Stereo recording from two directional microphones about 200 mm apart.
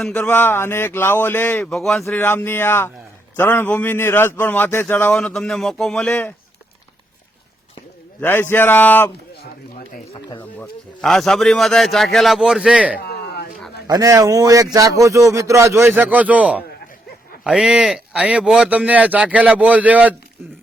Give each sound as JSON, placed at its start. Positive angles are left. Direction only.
{"t": 0.0, "sound": "a man's voice", "side_deg": 10}
{"t": 8.2, "sound": "a man's voice", "side_deg": 10}
{"t": 10.1, "sound": "speech", "side_deg": 20}
{"t": 10.6, "sound": "speech", "side_deg": 0}
{"t": 13.0, "sound": "a sound", "side_deg": 55}
{"t": 13.8, "sound": "speech", "side_deg": -20}